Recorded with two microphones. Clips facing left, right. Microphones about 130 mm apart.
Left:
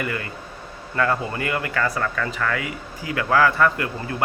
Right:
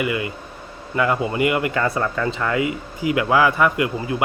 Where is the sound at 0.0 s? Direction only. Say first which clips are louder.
Right 5 dB; 15° right (ahead or behind).